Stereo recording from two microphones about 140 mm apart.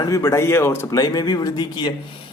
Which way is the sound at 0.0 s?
25° left (ahead or behind).